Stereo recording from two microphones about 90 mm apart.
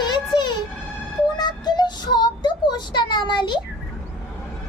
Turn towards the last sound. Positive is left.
turn(degrees=55)  # may be behind; listen again after turning